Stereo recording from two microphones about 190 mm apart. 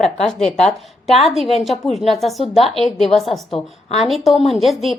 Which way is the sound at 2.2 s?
Centre (ahead or behind).